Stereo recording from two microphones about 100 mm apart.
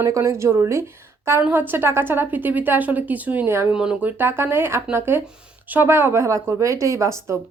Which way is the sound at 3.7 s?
10° right (ahead or behind).